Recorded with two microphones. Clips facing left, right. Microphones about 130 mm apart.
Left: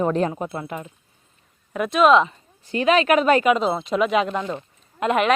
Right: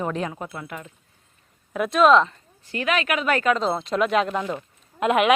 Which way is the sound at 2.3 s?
25° left (ahead or behind).